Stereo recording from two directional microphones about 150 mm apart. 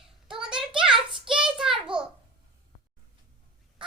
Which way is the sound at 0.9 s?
35° right (ahead or behind).